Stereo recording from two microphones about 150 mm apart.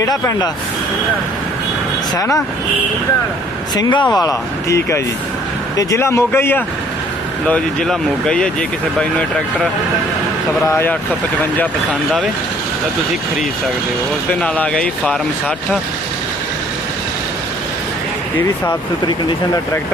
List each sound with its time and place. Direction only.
0.0 s speech: 25° left (ahead or behind)
2.1 s speech: 20° left (ahead or behind)
3.8 s speech: 30° left (ahead or behind); by 8.4 s 5° left (ahead or behind)
10.7 s speech: 15° left (ahead or behind)
14.4 s speech: 10° left (ahead or behind)